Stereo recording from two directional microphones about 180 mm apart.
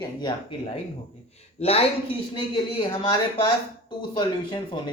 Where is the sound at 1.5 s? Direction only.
35° left (ahead or behind).